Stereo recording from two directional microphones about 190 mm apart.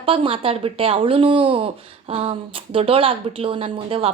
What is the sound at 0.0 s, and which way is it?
A woman's voice, 30° right (ahead or behind).